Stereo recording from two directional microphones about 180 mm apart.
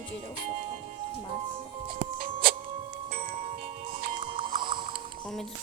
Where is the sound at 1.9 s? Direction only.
55° right (ahead or behind).